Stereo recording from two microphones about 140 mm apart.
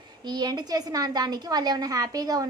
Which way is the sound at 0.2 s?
30° right (ahead or behind).